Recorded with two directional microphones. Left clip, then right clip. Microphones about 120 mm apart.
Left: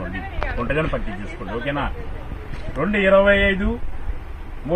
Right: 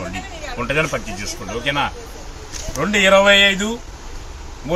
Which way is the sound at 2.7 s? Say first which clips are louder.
Right 3 dB; 30° right (ahead or behind).